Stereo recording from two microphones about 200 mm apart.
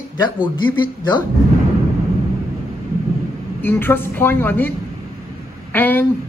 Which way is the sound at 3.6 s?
10° left (ahead or behind).